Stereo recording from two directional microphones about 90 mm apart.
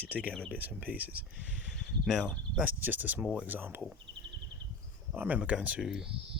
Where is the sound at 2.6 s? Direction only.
20° right (ahead or behind).